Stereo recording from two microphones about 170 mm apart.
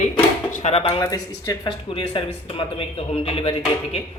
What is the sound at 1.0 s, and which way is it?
Speech, 20° left (ahead or behind).